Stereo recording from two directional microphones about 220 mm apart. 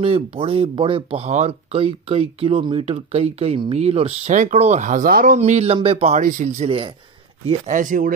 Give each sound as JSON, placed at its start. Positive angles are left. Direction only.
{"t": 0.0, "sound": "speech", "side_deg": -25}